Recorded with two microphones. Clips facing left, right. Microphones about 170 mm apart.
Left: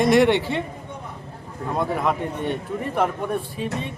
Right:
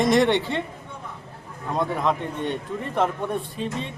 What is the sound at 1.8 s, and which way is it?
Speech, 5° left (ahead or behind).